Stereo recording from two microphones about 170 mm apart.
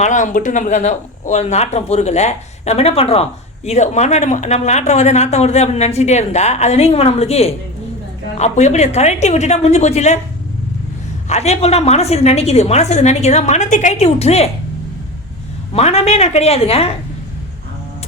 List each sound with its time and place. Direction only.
0.0 s speech: 50° left (ahead or behind)
11.3 s speech: 40° left (ahead or behind)
15.7 s speech: 35° left (ahead or behind)